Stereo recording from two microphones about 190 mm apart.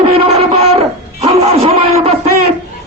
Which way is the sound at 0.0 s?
30° right (ahead or behind).